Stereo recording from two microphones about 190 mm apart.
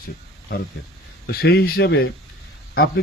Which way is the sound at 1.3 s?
55° left (ahead or behind).